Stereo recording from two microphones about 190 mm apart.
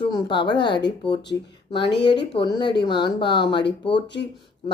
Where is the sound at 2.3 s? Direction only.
25° left (ahead or behind).